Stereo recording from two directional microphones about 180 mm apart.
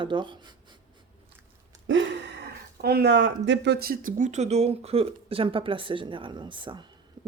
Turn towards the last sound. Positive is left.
turn(degrees=-25)  # may be behind; listen again after turning